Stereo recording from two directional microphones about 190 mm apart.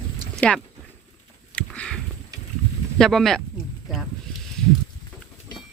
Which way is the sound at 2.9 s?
Centre (ahead or behind).